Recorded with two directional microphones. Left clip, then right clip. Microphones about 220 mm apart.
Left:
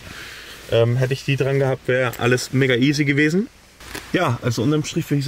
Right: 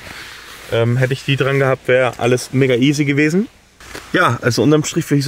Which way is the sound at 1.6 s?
50° left (ahead or behind).